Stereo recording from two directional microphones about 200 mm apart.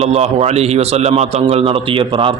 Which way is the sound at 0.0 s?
30° right (ahead or behind).